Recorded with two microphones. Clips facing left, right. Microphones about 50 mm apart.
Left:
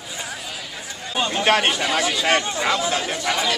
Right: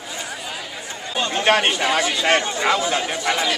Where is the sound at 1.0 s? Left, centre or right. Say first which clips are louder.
Right 1 dB; centre.